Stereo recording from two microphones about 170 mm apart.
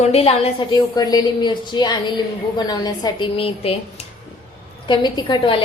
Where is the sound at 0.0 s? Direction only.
35° left (ahead or behind).